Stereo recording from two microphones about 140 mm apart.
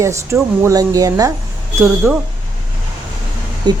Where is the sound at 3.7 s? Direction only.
30° right (ahead or behind).